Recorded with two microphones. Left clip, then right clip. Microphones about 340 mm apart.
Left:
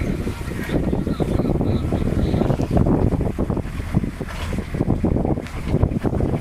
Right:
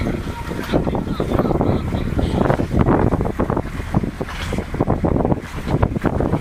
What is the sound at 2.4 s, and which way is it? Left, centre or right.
Boat, right.